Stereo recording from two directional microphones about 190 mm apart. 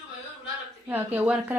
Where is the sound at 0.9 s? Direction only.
10° right (ahead or behind).